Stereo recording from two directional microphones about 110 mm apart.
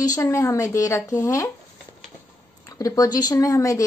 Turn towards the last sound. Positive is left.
turn(degrees=30)  # may be behind; listen again after turning